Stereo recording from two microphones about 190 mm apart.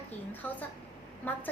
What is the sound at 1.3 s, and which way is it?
Speech, 10° left (ahead or behind).